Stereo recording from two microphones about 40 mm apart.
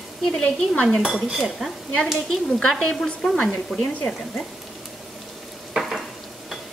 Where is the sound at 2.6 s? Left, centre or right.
Centre.